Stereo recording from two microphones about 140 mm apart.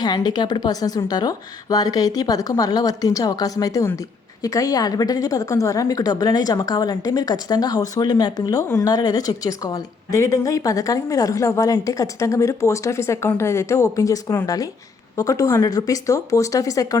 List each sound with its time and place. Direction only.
0.0 s a woman's voice: 30° left (ahead or behind)